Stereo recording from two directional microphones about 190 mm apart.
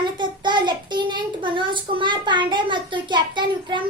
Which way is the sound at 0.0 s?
25° right (ahead or behind).